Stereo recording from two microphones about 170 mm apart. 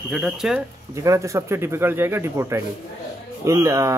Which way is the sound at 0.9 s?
15° right (ahead or behind).